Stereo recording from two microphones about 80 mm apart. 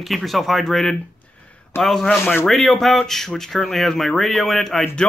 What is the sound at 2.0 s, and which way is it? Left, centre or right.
Speech, left.